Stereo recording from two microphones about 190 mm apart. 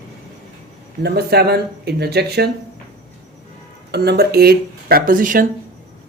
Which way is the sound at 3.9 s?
60° right (ahead or behind).